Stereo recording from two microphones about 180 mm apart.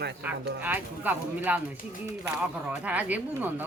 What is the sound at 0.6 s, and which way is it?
Speech, 10° right (ahead or behind).